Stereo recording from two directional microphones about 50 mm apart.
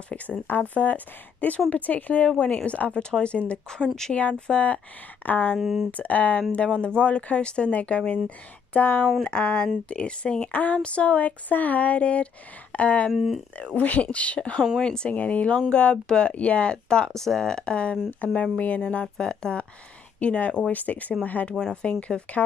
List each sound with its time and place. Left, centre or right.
0.5 s a woman's voice: left; by 4.1 s centre
4.1 s a woman's voice: left
5.2 s speech: left
5.6 s speech: centre
5.9 s a woman's voice: left
13.1 s speech: centre
13.7 s a woman's voice: left
17.1 s a woman's voice: centre; by 22.4 s left